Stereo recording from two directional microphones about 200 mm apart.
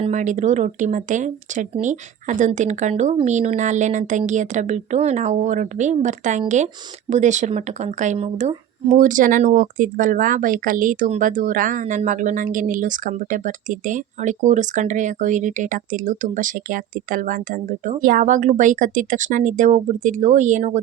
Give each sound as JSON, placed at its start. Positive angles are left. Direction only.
{"t": 0.0, "sound": "speech", "side_deg": -35}